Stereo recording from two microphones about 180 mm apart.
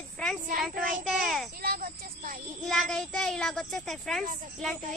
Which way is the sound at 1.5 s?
55° right (ahead or behind).